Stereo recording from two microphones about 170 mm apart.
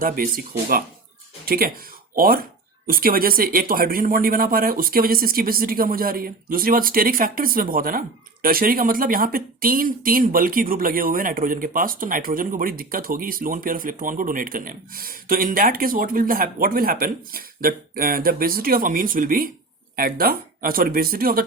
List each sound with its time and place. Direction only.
0.0 s speech: 60° right (ahead or behind)
1.5 s speech: 60° right (ahead or behind)